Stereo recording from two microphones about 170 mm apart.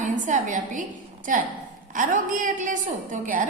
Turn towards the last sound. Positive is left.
turn(degrees=-50)  # may be behind; listen again after turning